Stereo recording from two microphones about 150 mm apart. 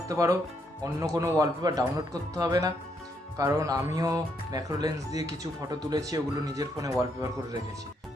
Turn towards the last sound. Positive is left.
turn(degrees=-20)  # may be behind; listen again after turning